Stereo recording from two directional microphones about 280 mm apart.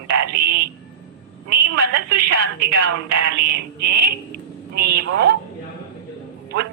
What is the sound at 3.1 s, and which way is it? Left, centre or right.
Speech, right.